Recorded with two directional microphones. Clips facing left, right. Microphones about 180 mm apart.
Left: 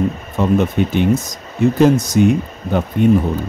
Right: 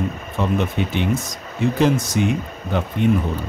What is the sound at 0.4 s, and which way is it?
Speech, 45° left (ahead or behind).